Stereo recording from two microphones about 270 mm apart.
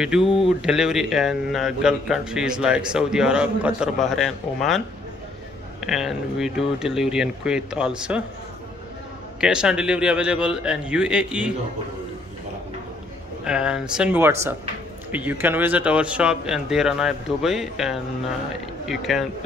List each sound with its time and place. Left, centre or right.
0.2 s speech: centre
0.5 s a man's voice: centre
9.4 s a man's voice: centre
13.4 s a man's voice: centre